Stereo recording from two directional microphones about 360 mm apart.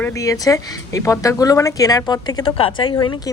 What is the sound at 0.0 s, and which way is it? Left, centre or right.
A woman's voice, centre.